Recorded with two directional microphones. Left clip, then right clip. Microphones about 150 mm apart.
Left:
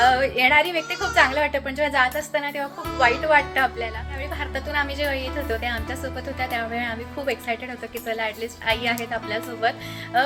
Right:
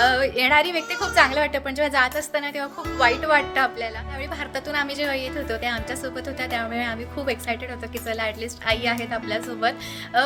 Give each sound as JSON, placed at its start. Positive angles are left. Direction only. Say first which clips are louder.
{"t": 0.0, "sound": "a woman's voice", "louder": "left 1 dB", "side_deg": -25}